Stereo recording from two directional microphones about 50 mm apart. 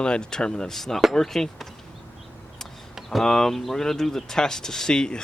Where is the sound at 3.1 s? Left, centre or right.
Centre.